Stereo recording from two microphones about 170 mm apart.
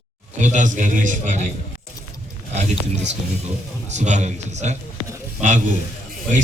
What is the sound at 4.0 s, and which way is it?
Speech, 45° right (ahead or behind).